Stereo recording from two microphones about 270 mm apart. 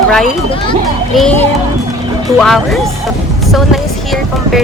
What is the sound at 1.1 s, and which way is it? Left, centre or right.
A woman's voice, centre.